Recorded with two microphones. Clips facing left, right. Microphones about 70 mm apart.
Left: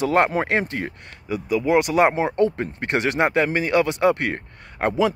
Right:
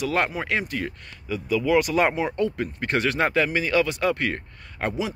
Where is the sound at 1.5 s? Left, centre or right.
Left.